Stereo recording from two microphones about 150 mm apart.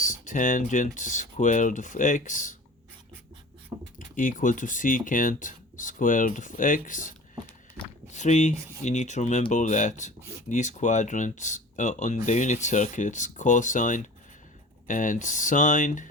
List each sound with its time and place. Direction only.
0.0 s speech: 60° left (ahead or behind)
3.9 s speech: 60° left (ahead or behind)
8.1 s speech: 50° left (ahead or behind)